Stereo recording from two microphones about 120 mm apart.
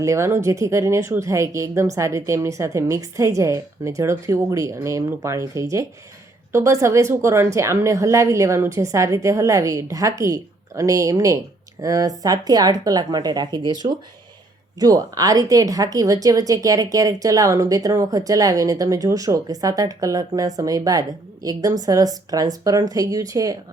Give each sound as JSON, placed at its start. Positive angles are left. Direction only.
{"t": 0.0, "sound": "speech", "side_deg": -25}